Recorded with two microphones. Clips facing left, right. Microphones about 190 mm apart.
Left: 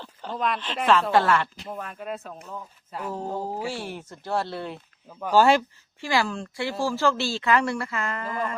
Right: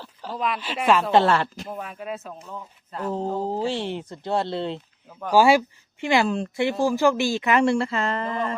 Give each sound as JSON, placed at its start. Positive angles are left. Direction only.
{"t": 0.0, "sound": "speech", "side_deg": -5}
{"t": 1.1, "sound": "speech", "side_deg": -25}
{"t": 1.7, "sound": "speech", "side_deg": -5}
{"t": 3.4, "sound": "speech", "side_deg": -20}
{"t": 5.3, "sound": "speech", "side_deg": -10}
{"t": 6.0, "sound": "speech", "side_deg": -20}